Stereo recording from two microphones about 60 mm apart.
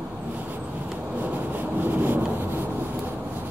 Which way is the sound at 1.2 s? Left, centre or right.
Right.